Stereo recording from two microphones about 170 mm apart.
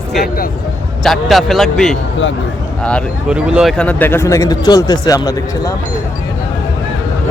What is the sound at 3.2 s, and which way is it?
A man's voice, 5° right (ahead or behind).